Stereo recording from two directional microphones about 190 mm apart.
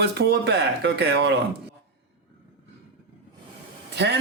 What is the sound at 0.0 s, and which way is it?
Speech, 60° right (ahead or behind).